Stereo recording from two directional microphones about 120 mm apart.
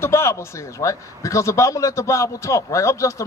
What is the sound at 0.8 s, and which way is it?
A man's voice, 25° left (ahead or behind).